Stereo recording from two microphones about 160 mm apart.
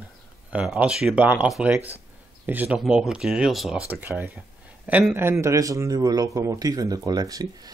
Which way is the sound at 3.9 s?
10° right (ahead or behind).